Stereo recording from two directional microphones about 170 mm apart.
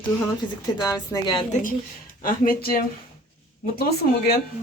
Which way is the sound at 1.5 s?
50° left (ahead or behind).